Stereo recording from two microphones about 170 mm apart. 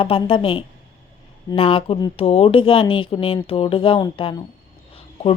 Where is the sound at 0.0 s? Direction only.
30° left (ahead or behind).